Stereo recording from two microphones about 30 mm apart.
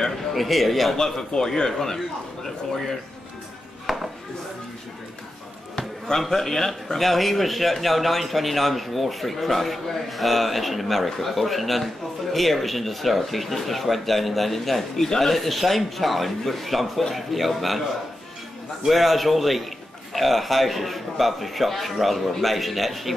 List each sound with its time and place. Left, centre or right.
0.3 s speech: centre
1.3 s speech: centre
3.9 s chopping: centre
6.1 s speech: centre
18.9 s speech: centre